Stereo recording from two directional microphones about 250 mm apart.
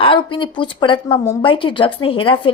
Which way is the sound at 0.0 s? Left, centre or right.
Centre.